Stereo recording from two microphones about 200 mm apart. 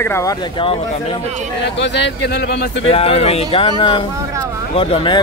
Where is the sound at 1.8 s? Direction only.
60° left (ahead or behind).